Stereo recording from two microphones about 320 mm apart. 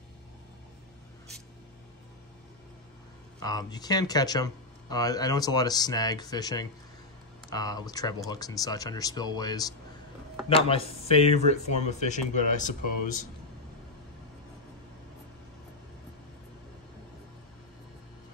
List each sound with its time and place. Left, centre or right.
3.3 s speech: centre